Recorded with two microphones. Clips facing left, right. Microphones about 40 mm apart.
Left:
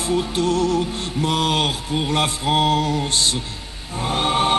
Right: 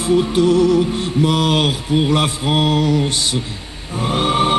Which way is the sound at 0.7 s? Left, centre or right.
Right.